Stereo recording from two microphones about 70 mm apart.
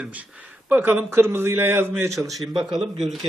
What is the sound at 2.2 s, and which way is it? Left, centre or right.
Speech, centre.